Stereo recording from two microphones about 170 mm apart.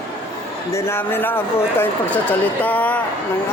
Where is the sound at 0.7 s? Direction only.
15° left (ahead or behind).